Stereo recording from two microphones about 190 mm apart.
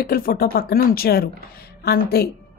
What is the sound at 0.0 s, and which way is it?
Speech, 50° left (ahead or behind).